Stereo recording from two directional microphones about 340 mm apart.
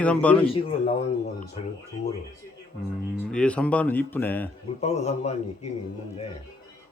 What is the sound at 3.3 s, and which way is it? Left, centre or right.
Speech, centre.